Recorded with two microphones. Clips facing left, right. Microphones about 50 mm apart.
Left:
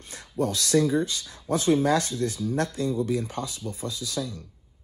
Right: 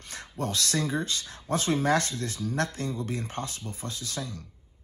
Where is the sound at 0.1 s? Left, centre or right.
Right.